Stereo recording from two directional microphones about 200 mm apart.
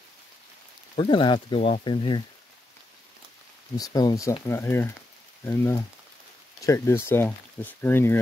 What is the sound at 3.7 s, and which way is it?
Speech, 20° left (ahead or behind).